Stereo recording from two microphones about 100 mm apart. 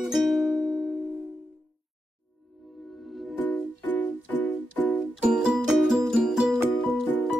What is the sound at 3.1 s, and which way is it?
Music, centre (ahead or behind).